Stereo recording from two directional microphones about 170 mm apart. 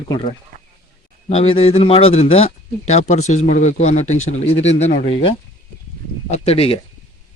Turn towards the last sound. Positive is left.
turn(degrees=35)  # may be behind; listen again after turning